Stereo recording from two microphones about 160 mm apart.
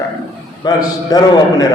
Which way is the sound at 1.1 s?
25° left (ahead or behind).